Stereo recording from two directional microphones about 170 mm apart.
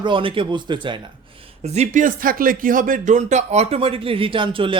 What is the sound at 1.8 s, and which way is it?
Speech, 50° right (ahead or behind).